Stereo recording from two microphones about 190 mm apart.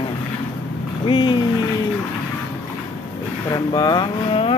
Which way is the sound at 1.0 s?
25° left (ahead or behind).